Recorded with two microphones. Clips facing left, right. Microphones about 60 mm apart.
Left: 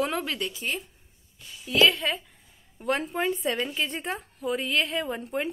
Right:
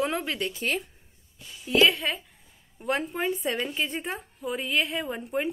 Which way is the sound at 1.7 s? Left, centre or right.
Right.